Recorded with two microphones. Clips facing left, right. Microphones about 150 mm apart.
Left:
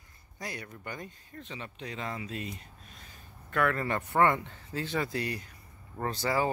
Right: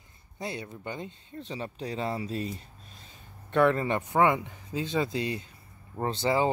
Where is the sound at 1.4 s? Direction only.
35° right (ahead or behind).